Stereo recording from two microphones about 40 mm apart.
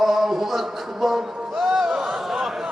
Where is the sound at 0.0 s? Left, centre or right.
Centre.